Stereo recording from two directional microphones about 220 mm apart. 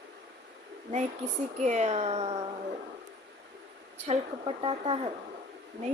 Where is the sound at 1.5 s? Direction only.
30° right (ahead or behind).